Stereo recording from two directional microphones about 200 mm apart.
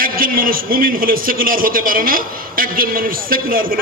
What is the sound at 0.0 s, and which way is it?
A man's voice, 45° right (ahead or behind).